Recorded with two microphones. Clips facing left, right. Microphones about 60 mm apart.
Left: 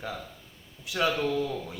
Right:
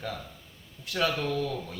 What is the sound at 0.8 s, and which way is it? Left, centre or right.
Speech, centre.